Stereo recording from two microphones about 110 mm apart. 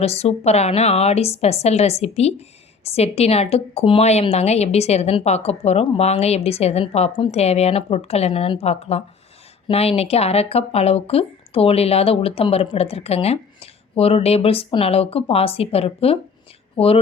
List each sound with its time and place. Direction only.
0.0 s a woman's voice: 70° left (ahead or behind)